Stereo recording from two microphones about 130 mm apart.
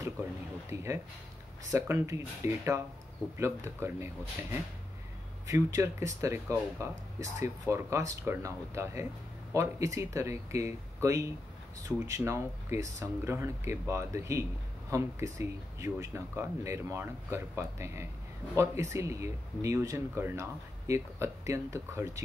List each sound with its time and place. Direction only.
0.7 s speech: 20° right (ahead or behind)